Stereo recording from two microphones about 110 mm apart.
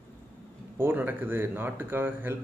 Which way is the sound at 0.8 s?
20° right (ahead or behind).